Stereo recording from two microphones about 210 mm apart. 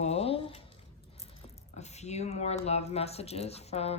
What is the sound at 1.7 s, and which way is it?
Speech, 30° left (ahead or behind).